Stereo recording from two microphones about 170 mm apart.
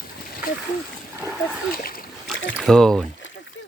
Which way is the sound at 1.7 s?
60° left (ahead or behind).